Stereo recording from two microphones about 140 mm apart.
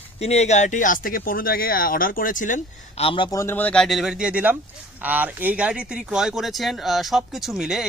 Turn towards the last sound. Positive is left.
turn(degrees=-5)  # may be behind; listen again after turning